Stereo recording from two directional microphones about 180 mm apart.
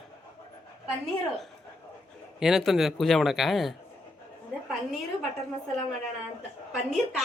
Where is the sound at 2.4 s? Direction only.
Centre (ahead or behind).